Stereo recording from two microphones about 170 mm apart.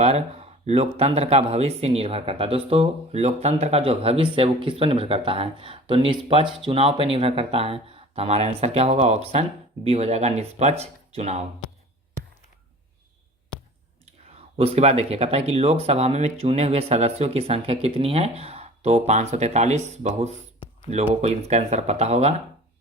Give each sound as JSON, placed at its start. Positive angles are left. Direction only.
{"t": 0.0, "sound": "speech", "side_deg": -40}
{"t": 14.6, "sound": "speech", "side_deg": -35}